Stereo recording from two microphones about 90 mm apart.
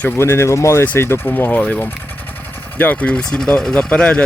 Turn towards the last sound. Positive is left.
turn(degrees=10)  # may be behind; listen again after turning